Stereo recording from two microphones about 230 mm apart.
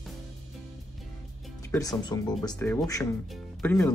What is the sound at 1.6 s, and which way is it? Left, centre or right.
Speech, centre.